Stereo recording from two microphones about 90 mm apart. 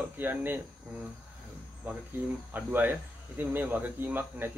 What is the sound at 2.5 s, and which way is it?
Speech, 20° right (ahead or behind).